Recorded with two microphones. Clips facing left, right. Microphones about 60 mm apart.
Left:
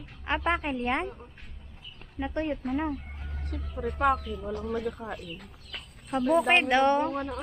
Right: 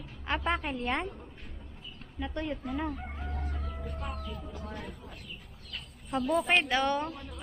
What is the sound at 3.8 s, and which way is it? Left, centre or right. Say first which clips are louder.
Speech: left 15 dB; left.